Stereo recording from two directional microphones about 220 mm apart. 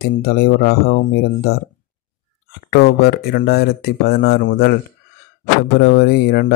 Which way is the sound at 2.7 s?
45° left (ahead or behind).